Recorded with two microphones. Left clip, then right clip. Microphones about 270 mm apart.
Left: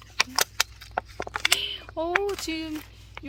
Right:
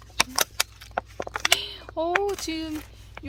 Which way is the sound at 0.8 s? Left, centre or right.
Centre.